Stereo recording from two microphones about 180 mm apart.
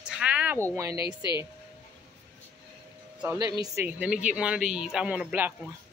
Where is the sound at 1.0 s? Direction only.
25° left (ahead or behind).